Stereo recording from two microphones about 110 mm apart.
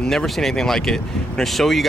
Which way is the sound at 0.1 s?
5° left (ahead or behind).